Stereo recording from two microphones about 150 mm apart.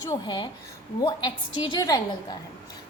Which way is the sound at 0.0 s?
25° left (ahead or behind).